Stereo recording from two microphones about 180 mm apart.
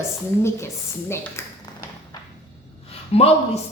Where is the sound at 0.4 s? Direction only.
15° left (ahead or behind).